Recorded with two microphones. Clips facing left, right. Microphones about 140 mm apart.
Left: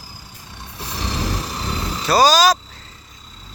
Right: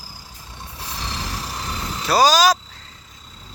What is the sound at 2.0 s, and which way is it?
Speech, 10° right (ahead or behind).